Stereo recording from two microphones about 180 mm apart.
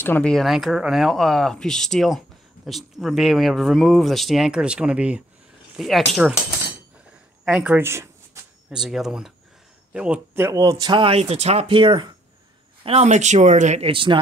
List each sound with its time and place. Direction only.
0.0 s speech: 10° left (ahead or behind)
7.4 s speech: 5° right (ahead or behind)
8.6 s speech: 5° right (ahead or behind); by 14.2 s 30° right (ahead or behind)